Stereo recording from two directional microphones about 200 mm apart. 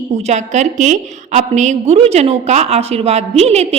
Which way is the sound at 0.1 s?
35° right (ahead or behind).